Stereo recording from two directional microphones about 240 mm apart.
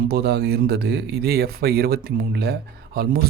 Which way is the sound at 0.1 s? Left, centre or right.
Right.